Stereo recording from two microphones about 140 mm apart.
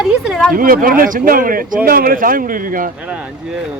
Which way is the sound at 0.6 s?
90° right.